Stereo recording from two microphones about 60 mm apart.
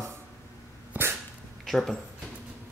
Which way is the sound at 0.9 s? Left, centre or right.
Right.